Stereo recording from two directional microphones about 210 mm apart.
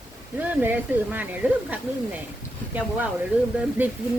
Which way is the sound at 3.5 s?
5° right (ahead or behind).